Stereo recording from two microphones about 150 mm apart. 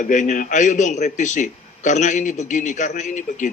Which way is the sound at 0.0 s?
55° left (ahead or behind).